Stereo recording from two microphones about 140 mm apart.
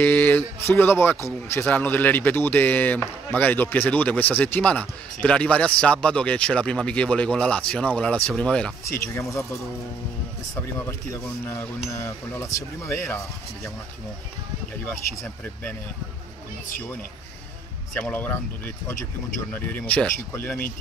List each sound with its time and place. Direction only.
0.0 s speech: 15° left (ahead or behind)
8.8 s speech: 20° left (ahead or behind)
17.9 s speech: 10° left (ahead or behind)
19.5 s speech: 10° left (ahead or behind)